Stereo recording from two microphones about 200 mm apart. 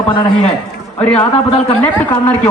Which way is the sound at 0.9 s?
10° left (ahead or behind).